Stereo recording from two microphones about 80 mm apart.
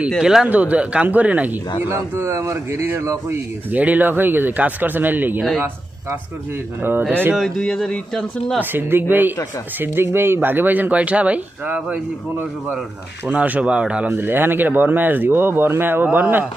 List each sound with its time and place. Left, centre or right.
0.2 s speech: centre
0.4 s speech: centre
1.8 s speech: right
3.7 s speech: centre
5.4 s speech: centre
7.1 s speech: right
7.3 s speech: centre
8.7 s speech: right
14.1 s speech: right